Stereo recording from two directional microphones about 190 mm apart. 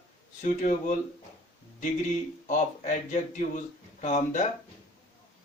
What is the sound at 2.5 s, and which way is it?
Speech, 40° left (ahead or behind).